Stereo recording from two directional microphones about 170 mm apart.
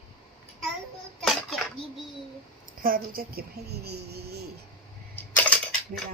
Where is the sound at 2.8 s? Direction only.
55° right (ahead or behind).